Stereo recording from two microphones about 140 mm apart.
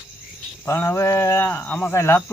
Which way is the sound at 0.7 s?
20° left (ahead or behind).